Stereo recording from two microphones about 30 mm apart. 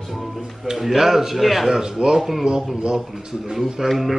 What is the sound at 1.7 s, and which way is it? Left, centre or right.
Speech, right.